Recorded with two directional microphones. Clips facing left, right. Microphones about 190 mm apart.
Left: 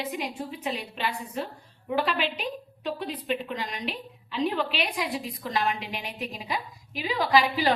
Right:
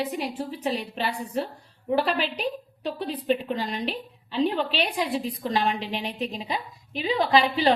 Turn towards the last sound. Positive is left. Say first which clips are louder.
# right 2 dB
turn(degrees=-25)  # may be behind; listen again after turning